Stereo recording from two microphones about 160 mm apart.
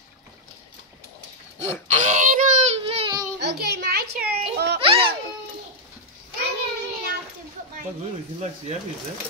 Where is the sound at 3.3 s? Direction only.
90° right.